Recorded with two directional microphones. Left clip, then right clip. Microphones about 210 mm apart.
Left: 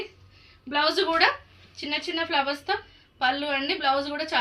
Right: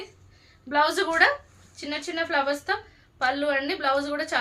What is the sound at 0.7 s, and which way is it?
A woman's voice, 25° right (ahead or behind).